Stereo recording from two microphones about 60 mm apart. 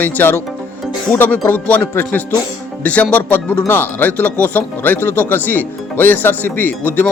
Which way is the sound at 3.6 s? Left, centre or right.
Left.